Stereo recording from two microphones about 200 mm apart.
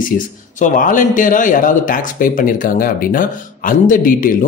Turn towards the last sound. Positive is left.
turn(degrees=45)  # may be behind; listen again after turning